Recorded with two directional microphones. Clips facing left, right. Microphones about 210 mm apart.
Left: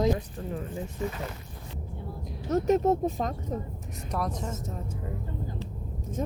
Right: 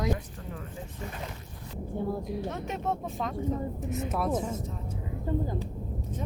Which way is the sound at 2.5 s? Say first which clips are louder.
Left 10 dB; 40° left (ahead or behind).